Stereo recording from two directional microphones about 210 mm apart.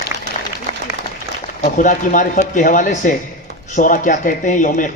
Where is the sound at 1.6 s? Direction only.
40° left (ahead or behind).